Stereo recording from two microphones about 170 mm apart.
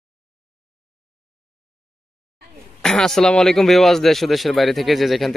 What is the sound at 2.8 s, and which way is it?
Speech, 5° left (ahead or behind).